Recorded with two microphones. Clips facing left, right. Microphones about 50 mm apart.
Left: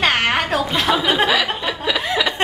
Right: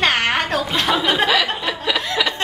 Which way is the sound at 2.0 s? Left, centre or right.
Centre.